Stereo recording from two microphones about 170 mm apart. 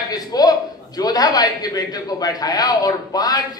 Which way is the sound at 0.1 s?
20° left (ahead or behind).